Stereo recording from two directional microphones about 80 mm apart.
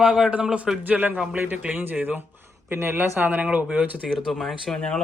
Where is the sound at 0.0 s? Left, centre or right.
Centre; by 3.1 s right.